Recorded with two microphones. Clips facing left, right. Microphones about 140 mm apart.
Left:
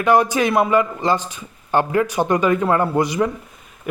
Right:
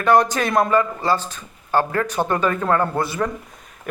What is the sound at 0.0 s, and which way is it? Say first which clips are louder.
A man's voice: left 1 dB; 10° left (ahead or behind).